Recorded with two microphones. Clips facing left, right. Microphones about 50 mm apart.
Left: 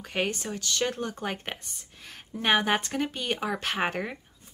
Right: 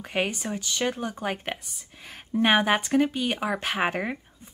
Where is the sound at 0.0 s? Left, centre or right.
Centre.